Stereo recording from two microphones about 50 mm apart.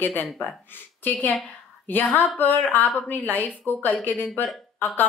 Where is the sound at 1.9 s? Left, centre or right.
Left.